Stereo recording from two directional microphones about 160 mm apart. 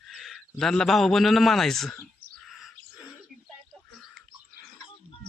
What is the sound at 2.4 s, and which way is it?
Chirp, centre (ahead or behind).